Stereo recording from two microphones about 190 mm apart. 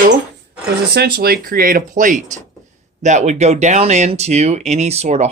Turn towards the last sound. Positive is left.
turn(degrees=-35)  # may be behind; listen again after turning